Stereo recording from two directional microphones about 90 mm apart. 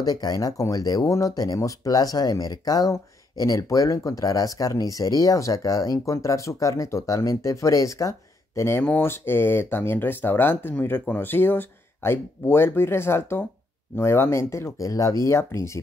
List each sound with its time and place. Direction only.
0.0 s speech: 45° left (ahead or behind)